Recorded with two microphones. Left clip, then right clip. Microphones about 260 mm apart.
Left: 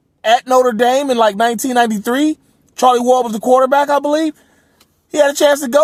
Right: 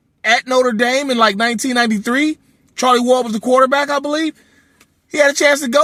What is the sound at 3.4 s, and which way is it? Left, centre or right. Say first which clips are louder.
Speech: left 2 dB; left.